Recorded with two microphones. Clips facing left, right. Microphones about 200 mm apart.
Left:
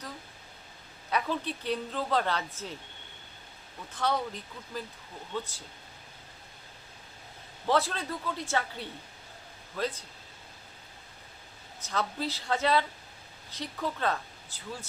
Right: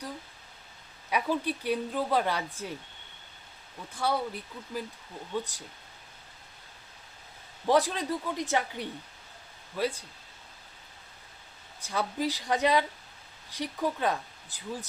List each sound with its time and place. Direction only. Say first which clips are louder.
1.1 s speech: right 2 dB; 10° right (ahead or behind)
3.9 s speech: right 1 dB; 10° right (ahead or behind)
7.7 s speech: right 3 dB; 15° right (ahead or behind)
11.9 s speech: right 2 dB; 15° right (ahead or behind)